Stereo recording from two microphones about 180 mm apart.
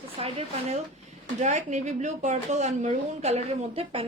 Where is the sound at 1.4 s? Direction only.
40° right (ahead or behind).